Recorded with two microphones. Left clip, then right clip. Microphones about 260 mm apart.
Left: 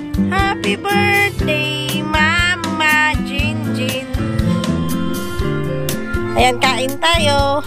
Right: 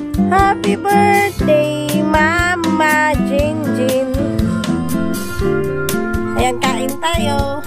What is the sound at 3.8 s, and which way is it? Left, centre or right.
Music, centre.